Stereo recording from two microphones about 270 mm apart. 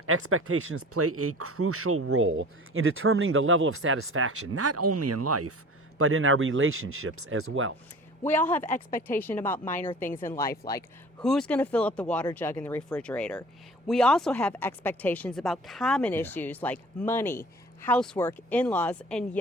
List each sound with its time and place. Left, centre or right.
0.0 s speech: right
6.0 s speech: right
8.2 s speech: centre
8.7 s a woman's voice: left
9.0 s speech: centre
11.2 s speech: centre